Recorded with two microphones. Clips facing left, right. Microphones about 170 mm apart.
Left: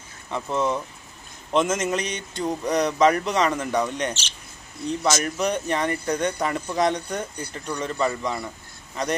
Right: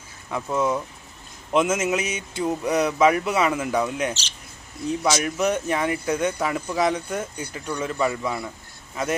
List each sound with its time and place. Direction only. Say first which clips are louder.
0.3 s a man's voice: right 1 dB; 10° right (ahead or behind)